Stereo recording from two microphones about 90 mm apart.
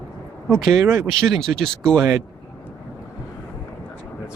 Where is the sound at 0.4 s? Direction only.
5° left (ahead or behind).